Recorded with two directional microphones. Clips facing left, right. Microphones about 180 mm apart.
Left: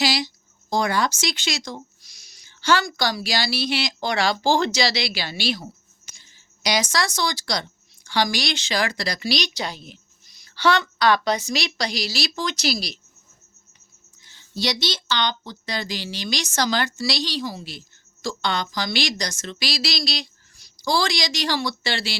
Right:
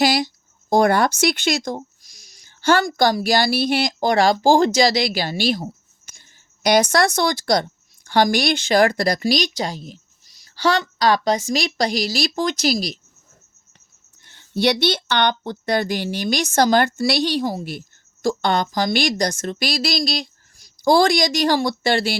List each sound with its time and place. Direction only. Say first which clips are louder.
0.0 s speech: right 5 dB; 55° right (ahead or behind)
14.2 s speech: right 7 dB; 60° right (ahead or behind)